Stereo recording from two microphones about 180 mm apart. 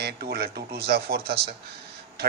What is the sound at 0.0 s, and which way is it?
A man's voice, 60° right (ahead or behind).